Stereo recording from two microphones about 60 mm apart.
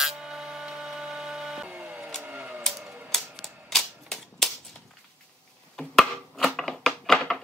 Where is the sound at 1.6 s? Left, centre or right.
Right.